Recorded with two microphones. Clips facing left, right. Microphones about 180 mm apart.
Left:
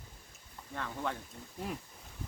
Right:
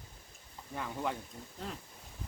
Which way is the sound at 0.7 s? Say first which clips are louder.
Right 1 dB; 10° right (ahead or behind).